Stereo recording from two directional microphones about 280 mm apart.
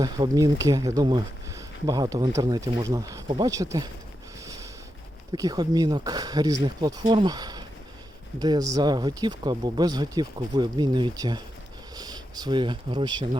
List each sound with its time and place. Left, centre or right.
0.0 s speech: centre
4.4 s a sound: centre
5.3 s speech: centre